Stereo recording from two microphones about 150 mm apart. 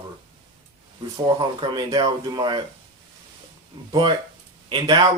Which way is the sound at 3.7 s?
30° right (ahead or behind).